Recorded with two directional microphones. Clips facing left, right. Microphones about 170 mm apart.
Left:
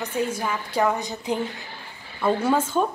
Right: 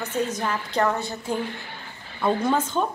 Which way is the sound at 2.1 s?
5° left (ahead or behind).